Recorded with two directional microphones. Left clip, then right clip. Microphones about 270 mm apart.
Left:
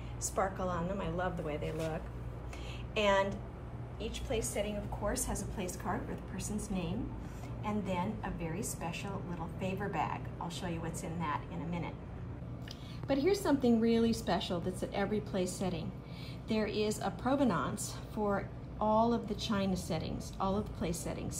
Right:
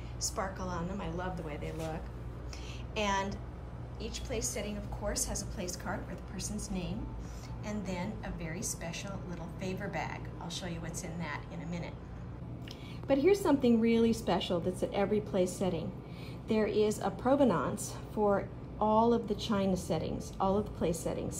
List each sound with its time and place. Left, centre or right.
0.2 s a woman's voice: centre
13.1 s a woman's voice: centre